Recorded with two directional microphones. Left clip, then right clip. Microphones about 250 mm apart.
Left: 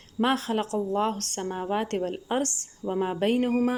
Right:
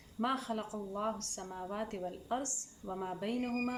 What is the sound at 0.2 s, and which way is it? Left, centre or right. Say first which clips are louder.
A woman's voice: left 10 dB; left.